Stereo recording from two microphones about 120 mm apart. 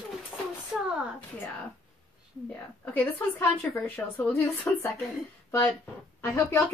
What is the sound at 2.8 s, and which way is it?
A woman's voice, 15° left (ahead or behind).